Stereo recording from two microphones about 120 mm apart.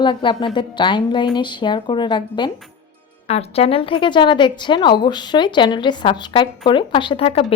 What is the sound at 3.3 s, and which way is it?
A woman's voice, 55° left (ahead or behind).